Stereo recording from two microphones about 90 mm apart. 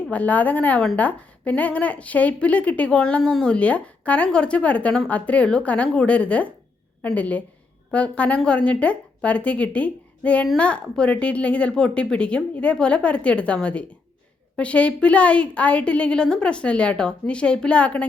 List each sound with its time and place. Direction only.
0.1 s speech: 15° left (ahead or behind)